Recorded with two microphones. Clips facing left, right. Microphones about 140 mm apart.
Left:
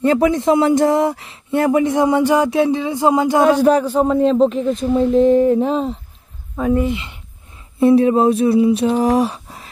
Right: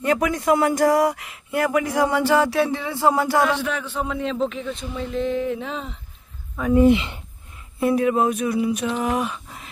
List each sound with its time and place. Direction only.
0.0 s speech: 30° left (ahead or behind)
3.4 s a man's voice: 40° left (ahead or behind)
6.9 s speech: 80° right
7.8 s a man's voice: 30° left (ahead or behind)